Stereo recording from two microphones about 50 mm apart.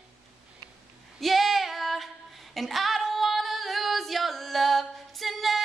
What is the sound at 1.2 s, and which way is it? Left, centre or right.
Female singing, centre.